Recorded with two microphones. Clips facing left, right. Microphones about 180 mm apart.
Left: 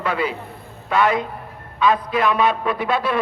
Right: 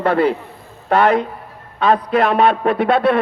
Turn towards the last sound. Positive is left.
turn(degrees=-65)  # may be behind; listen again after turning